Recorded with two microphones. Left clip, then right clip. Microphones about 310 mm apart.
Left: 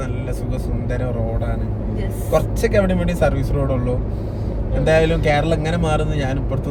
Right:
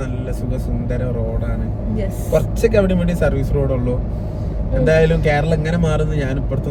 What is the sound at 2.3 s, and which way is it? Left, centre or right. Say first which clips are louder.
Speech: right 2 dB; centre.